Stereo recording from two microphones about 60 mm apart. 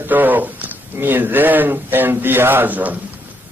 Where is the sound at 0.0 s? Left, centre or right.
Right.